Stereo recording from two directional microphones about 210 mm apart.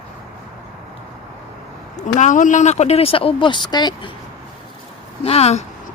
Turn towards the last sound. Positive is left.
turn(degrees=30)  # may be behind; listen again after turning